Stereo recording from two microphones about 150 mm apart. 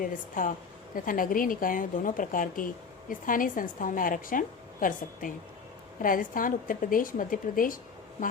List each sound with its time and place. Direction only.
0.0 s a woman's voice: 65° left (ahead or behind)